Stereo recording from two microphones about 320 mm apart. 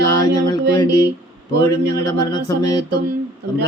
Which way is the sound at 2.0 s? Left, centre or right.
Centre.